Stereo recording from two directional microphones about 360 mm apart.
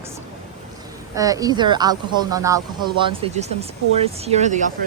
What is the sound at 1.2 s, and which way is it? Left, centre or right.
Speech, centre.